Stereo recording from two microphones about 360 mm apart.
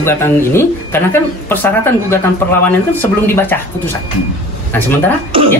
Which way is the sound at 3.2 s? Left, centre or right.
Centre.